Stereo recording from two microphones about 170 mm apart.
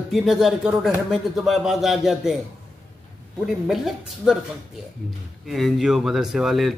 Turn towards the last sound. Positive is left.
turn(degrees=0)  # may be behind; listen again after turning